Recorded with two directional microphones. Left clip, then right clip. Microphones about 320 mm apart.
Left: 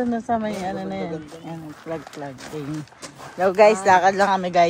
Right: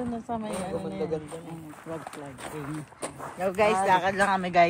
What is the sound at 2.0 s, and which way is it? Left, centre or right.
Speech, right.